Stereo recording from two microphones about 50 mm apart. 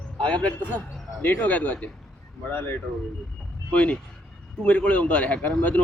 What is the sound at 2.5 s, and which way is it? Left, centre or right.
Speech, left.